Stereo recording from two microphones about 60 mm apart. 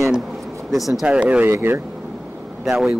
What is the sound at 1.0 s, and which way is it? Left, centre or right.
Speech, centre.